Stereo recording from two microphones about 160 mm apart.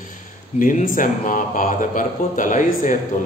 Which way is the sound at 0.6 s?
55° left (ahead or behind).